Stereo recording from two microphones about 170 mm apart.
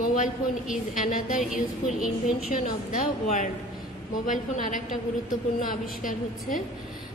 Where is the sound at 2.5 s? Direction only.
55° left (ahead or behind).